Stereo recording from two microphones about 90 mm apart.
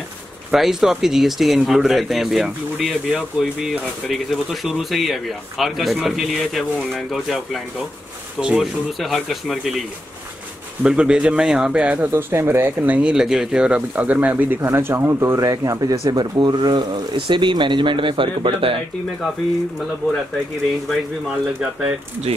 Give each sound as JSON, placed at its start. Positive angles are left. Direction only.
{"t": 0.5, "sound": "speech", "side_deg": -5}
{"t": 3.1, "sound": "speech", "side_deg": -15}
{"t": 3.6, "sound": "speech", "side_deg": 0}
{"t": 10.8, "sound": "speech", "side_deg": -10}
{"t": 13.1, "sound": "speech", "side_deg": -5}